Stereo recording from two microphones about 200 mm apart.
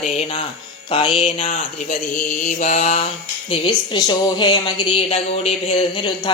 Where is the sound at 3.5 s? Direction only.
20° left (ahead or behind).